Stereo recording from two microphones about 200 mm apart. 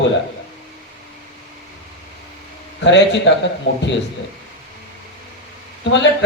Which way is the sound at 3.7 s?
65° left (ahead or behind).